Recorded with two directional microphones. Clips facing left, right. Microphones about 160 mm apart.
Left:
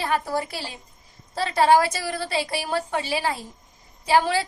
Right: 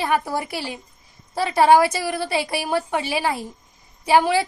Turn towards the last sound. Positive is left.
turn(degrees=-15)  # may be behind; listen again after turning